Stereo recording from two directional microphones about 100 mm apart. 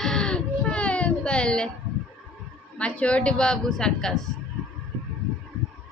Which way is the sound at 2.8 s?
10° left (ahead or behind).